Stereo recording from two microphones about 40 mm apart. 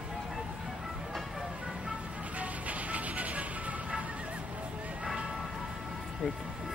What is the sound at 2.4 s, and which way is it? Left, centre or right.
Music, right.